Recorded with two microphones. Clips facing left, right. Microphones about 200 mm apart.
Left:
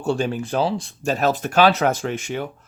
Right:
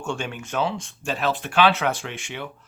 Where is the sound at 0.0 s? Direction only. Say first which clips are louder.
Left 8 dB; 35° left (ahead or behind).